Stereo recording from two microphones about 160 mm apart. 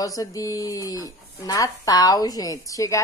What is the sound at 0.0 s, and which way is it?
Speech, 20° left (ahead or behind).